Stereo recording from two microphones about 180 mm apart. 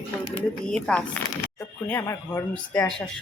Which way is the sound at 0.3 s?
5° left (ahead or behind).